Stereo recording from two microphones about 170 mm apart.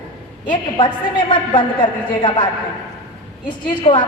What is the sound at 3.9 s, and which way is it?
Speech, 35° left (ahead or behind).